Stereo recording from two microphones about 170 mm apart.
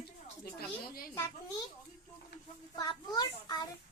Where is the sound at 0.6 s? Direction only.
60° left (ahead or behind).